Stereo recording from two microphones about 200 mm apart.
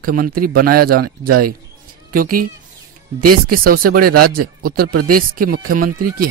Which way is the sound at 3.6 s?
45° right (ahead or behind).